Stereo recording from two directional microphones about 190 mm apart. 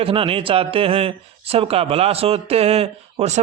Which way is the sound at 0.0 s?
30° right (ahead or behind).